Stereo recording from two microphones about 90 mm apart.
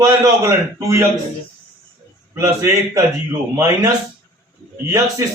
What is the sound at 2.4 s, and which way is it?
A man's voice, 30° right (ahead or behind).